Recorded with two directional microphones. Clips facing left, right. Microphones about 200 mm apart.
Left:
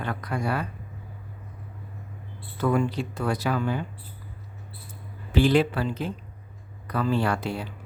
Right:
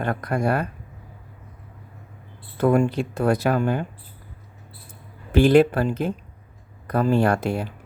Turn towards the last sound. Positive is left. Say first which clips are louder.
# right 6 dB
turn(degrees=-50)  # may be behind; listen again after turning